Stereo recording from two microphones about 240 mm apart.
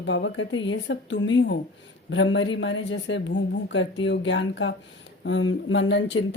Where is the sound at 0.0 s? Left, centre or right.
Left.